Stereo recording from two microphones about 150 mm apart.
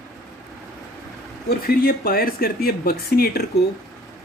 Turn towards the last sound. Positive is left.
turn(degrees=90)